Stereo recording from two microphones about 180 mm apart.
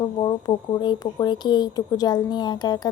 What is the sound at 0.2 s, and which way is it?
Speech, 25° left (ahead or behind).